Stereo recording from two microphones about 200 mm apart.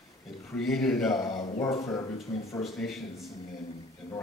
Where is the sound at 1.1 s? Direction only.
20° left (ahead or behind).